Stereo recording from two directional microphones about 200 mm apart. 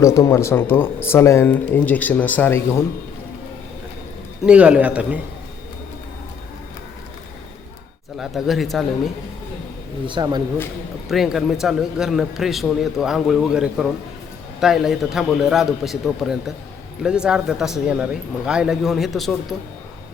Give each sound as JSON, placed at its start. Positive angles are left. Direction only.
{"t": 0.0, "sound": "speech", "side_deg": 15}
{"t": 4.4, "sound": "a man's voice", "side_deg": -5}
{"t": 8.2, "sound": "a man's voice", "side_deg": 0}
{"t": 10.1, "sound": "speech", "side_deg": -20}
{"t": 11.1, "sound": "a man's voice", "side_deg": 0}